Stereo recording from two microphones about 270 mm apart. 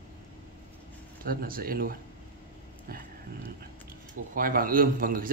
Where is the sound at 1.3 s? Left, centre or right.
Right.